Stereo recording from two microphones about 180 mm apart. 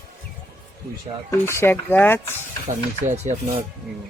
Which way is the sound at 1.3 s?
15° left (ahead or behind).